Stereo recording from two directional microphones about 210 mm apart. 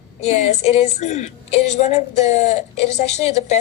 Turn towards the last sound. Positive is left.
turn(degrees=30)  # may be behind; listen again after turning